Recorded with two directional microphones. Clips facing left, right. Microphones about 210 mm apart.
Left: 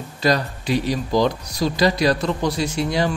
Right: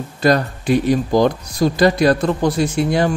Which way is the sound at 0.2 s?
50° right (ahead or behind).